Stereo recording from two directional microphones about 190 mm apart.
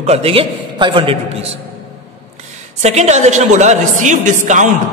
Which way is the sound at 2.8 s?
35° right (ahead or behind).